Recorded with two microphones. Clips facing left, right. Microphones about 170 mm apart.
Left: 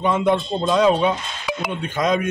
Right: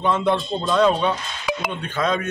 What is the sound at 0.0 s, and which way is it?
A man's voice, 10° left (ahead or behind).